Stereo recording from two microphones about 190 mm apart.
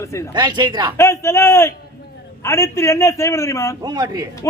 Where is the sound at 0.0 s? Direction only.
15° left (ahead or behind).